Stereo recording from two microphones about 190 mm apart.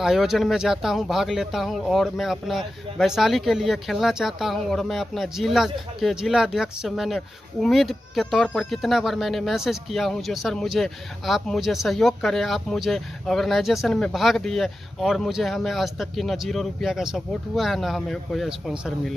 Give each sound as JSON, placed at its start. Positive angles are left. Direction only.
{"t": 0.0, "sound": "speech", "side_deg": 0}